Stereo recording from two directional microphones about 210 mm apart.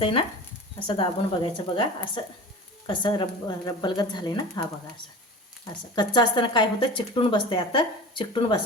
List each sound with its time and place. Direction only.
0.0 s speech: 25° left (ahead or behind)